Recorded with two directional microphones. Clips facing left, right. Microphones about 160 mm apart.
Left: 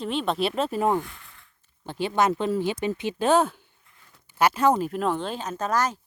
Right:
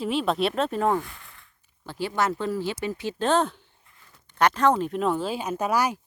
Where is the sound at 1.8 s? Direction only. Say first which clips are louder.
Left 3 dB; 20° left (ahead or behind).